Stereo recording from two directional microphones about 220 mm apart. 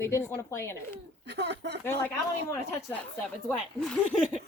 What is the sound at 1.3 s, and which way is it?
Speech, 50° right (ahead or behind).